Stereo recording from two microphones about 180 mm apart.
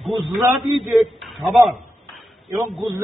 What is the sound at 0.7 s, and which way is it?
Speech, centre (ahead or behind).